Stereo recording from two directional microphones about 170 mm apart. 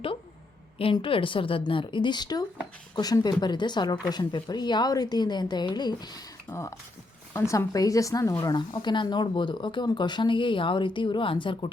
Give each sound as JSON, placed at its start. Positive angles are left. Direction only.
{"t": 0.8, "sound": "speech", "side_deg": 30}